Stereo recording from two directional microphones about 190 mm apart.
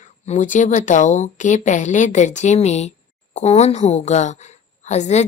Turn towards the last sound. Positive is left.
turn(degrees=35)  # may be behind; listen again after turning